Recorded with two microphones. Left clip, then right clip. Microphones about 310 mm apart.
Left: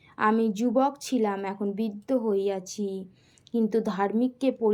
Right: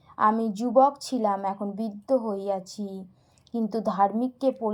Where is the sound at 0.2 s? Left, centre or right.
Centre.